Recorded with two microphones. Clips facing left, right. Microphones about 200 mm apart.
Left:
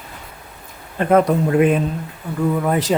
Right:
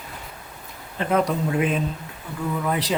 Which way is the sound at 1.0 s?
55° left (ahead or behind).